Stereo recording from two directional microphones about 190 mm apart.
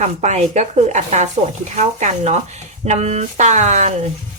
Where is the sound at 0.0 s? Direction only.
35° right (ahead or behind).